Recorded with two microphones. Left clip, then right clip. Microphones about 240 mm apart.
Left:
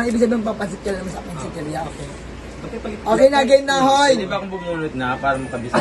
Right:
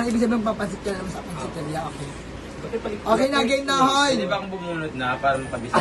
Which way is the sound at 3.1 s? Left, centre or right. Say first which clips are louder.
Left 8 dB; centre.